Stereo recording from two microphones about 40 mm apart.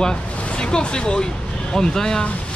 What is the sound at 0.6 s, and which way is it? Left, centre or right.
Speech, centre.